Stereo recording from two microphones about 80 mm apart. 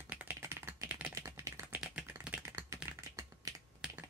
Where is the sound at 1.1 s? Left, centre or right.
Right.